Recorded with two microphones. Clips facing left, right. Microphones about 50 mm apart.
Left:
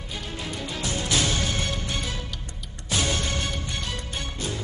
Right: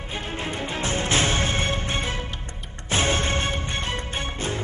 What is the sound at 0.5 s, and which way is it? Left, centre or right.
Music, right.